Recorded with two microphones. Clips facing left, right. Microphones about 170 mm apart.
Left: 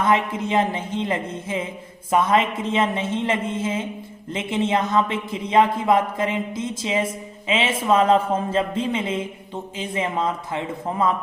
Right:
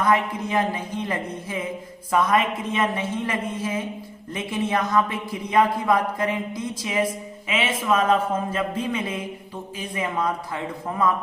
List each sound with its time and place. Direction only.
0.0 s speech: 25° left (ahead or behind)